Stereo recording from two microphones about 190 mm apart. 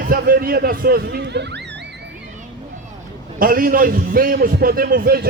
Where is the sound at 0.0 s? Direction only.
50° right (ahead or behind).